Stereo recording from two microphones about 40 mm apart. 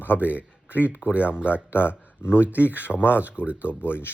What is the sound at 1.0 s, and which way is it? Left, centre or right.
Speech, right.